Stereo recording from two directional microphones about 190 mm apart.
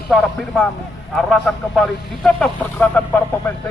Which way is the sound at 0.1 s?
5° left (ahead or behind).